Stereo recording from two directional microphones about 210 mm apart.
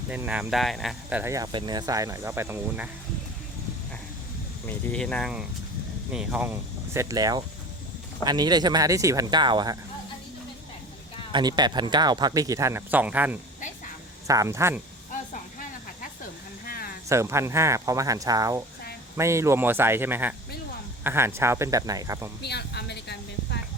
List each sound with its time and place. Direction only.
0.1 s speech: 5° right (ahead or behind)
1.2 s speech: 15° right (ahead or behind)
4.9 s speech: 5° left (ahead or behind); by 9.7 s 20° right (ahead or behind)
11.3 s speech: 20° right (ahead or behind)
16.6 s a sound: 45° left (ahead or behind)
17.1 s speech: 15° right (ahead or behind)
22.4 s a sound: 50° left (ahead or behind)